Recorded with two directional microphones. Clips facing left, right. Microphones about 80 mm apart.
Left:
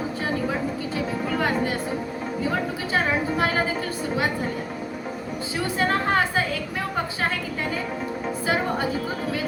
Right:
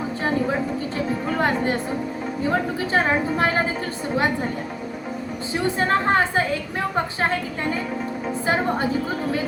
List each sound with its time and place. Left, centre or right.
2.9 s a woman's voice: right
5.6 s a woman's voice: right